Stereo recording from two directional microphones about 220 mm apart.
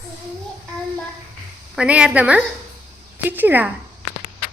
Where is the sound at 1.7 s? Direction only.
5° right (ahead or behind).